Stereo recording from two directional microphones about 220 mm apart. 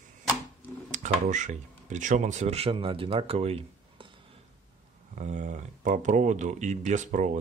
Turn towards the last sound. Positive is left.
turn(degrees=-35)  # may be behind; listen again after turning